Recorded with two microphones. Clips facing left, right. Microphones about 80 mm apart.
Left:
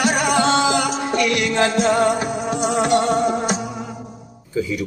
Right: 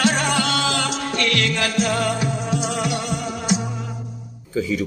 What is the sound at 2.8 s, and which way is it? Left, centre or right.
Music, left.